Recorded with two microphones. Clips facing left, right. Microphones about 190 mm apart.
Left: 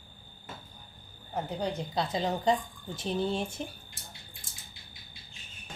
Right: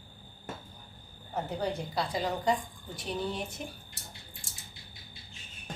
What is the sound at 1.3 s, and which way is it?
A woman's voice, 15° left (ahead or behind).